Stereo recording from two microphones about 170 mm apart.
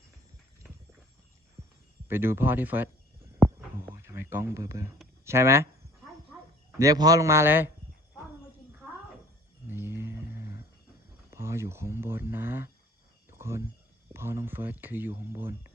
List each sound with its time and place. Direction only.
2.0 s speech: 15° right (ahead or behind)
3.4 s a sound: centre (ahead or behind)
3.8 s a sound: 15° right (ahead or behind)
5.2 s speech: 15° right (ahead or behind)
6.7 s a man's voice: 20° right (ahead or behind)
9.6 s roaring cats: 15° right (ahead or behind)
11.3 s speech: 15° right (ahead or behind)